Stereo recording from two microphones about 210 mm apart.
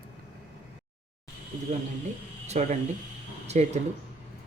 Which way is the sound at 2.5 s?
35° right (ahead or behind).